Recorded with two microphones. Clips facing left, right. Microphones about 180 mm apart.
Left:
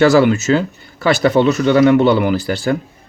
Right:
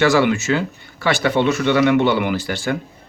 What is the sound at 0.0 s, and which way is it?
Speech, 40° left (ahead or behind).